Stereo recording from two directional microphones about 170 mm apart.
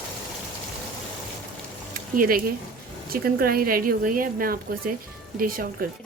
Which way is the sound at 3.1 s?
60° right (ahead or behind).